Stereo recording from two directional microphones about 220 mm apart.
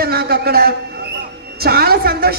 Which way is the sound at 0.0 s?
45° right (ahead or behind).